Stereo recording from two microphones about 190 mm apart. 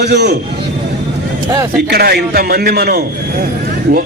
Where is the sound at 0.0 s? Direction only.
60° right (ahead or behind).